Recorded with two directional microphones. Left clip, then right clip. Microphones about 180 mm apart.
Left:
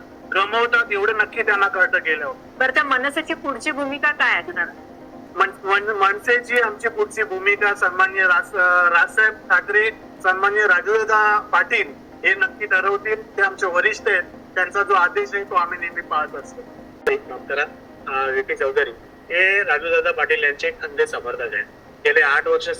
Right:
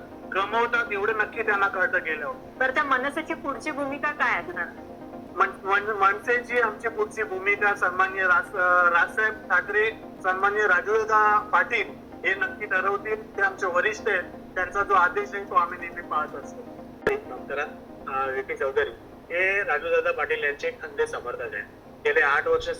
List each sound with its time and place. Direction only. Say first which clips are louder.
0.3 s a man's voice: left 6 dB; 35° left (ahead or behind)